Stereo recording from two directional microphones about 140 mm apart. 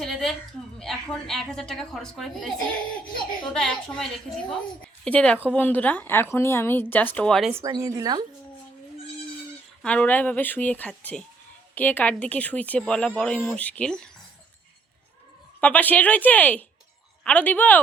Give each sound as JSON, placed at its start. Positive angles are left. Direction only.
{"t": 0.0, "sound": "a woman's voice", "side_deg": 0}
{"t": 3.5, "sound": "a woman's voice", "side_deg": 5}
{"t": 7.5, "sound": "speech", "side_deg": -25}
{"t": 9.8, "sound": "a woman's voice", "side_deg": 10}
{"t": 15.6, "sound": "a woman's voice", "side_deg": 10}